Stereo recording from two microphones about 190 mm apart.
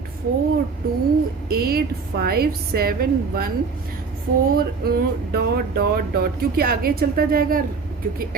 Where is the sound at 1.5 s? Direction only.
55° right (ahead or behind).